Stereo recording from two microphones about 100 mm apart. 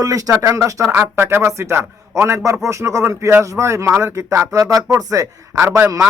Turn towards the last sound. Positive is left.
turn(degrees=-30)  # may be behind; listen again after turning